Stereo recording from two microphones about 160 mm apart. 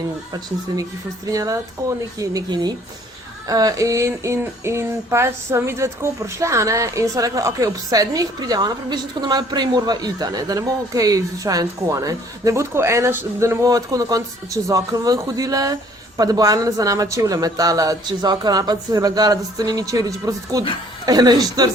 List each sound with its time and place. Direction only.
1.3 s music: 20° right (ahead or behind)